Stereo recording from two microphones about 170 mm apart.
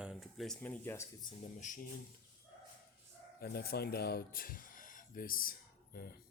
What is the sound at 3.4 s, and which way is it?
Speech, 65° left (ahead or behind).